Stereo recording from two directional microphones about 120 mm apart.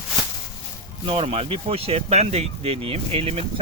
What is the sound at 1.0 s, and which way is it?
Speech, 50° right (ahead or behind).